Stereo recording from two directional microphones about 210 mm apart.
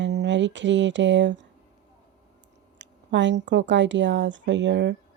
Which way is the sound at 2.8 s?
60° right (ahead or behind).